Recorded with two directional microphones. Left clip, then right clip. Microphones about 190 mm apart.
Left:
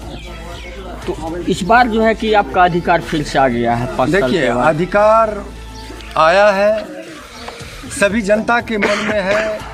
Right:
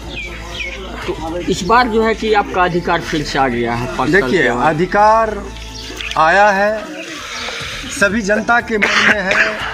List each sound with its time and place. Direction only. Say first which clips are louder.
1.7 s speech: left 1 dB; 40° left (ahead or behind)
4.3 s speech: even; 30° left (ahead or behind)
7.9 s speech: left 1 dB; 30° left (ahead or behind)
8.8 s speech: right 3 dB; centre (ahead or behind)